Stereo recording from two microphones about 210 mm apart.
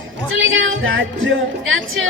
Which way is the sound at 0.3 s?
70° right (ahead or behind).